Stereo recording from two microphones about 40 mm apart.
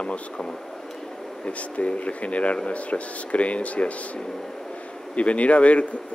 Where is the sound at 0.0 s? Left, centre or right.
Left.